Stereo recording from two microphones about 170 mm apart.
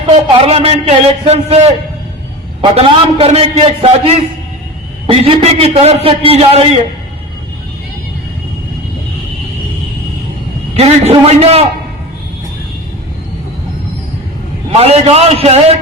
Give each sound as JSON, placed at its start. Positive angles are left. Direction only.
{"t": 0.3, "sound": "a man's voice", "side_deg": -35}
{"t": 10.8, "sound": "a man's voice", "side_deg": -40}
{"t": 14.7, "sound": "a man's voice", "side_deg": -40}